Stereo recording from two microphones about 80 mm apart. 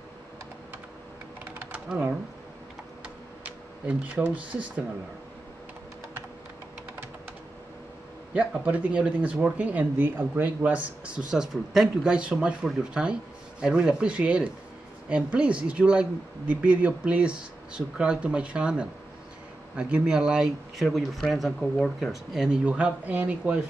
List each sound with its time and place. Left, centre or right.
1.4 s typing: right
1.7 s typing: centre
3.4 s a sound: centre
4.3 s speech: centre
8.3 s speech: centre
22.7 s speech: centre